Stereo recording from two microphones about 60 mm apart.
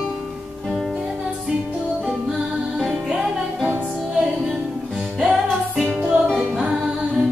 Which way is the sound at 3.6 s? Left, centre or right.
Right.